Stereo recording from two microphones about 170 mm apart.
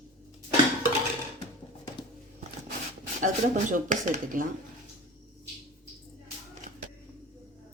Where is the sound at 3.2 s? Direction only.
50° right (ahead or behind).